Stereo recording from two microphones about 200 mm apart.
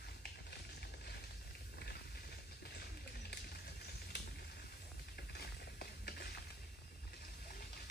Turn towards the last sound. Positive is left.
turn(degrees=45)  # may be behind; listen again after turning